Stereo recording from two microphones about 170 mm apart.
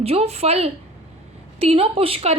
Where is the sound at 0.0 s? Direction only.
35° right (ahead or behind).